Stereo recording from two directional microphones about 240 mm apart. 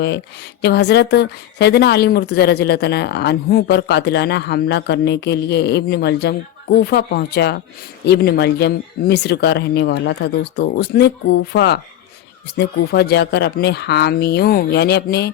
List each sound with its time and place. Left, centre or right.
0.6 s a woman's voice: left